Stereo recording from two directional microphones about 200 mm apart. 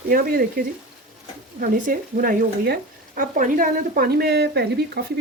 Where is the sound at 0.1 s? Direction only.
45° right (ahead or behind).